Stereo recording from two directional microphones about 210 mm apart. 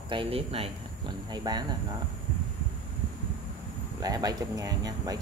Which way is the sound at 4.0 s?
15° right (ahead or behind).